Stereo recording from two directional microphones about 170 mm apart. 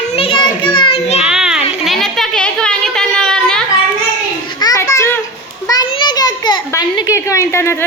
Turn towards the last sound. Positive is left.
turn(degrees=15)  # may be behind; listen again after turning